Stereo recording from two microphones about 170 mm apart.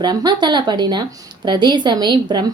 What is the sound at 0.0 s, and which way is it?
Speech, 25° right (ahead or behind).